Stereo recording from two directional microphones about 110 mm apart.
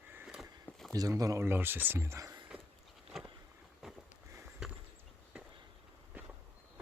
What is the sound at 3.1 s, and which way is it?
Boat, centre (ahead or behind).